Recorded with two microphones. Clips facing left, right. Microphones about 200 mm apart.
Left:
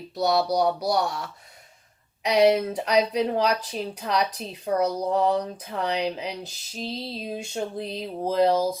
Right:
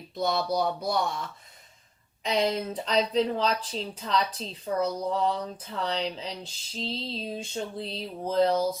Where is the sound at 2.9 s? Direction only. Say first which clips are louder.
Left 3 dB; 10° left (ahead or behind).